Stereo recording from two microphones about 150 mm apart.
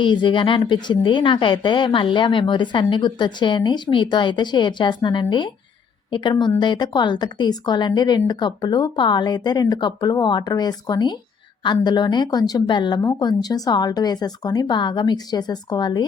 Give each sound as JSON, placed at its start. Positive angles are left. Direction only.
{"t": 0.0, "sound": "a woman's voice", "side_deg": 30}